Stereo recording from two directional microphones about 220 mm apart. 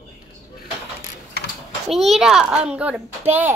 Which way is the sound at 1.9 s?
Centre (ahead or behind).